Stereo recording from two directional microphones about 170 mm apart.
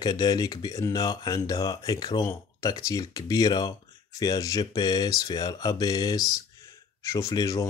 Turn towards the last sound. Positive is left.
turn(degrees=20)  # may be behind; listen again after turning